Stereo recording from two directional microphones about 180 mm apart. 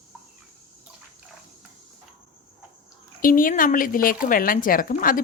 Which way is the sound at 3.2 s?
50° left (ahead or behind).